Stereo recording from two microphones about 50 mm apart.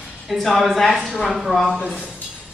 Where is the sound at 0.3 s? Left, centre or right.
Centre.